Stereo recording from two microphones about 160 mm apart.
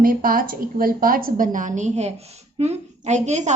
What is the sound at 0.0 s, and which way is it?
A woman's voice, 60° right (ahead or behind).